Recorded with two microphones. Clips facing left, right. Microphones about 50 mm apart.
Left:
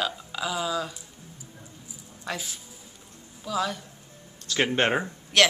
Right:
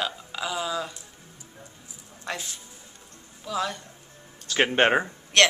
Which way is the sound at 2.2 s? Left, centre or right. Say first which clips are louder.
Even; centre.